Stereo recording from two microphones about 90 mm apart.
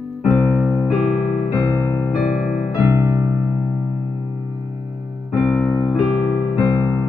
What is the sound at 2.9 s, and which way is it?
Music, 30° right (ahead or behind).